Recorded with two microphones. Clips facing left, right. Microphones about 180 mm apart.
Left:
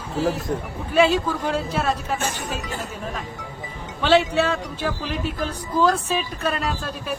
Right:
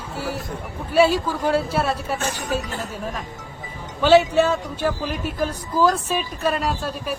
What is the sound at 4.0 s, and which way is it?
Speech, 5° right (ahead or behind).